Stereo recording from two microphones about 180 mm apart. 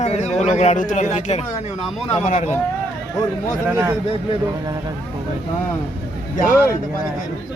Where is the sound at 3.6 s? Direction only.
10° right (ahead or behind).